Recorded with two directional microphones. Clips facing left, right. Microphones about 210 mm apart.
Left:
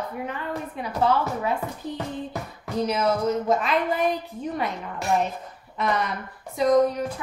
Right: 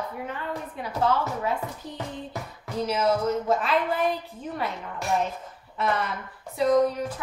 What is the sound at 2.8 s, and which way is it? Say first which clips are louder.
A woman's voice: left 1 dB; 15° left (ahead or behind).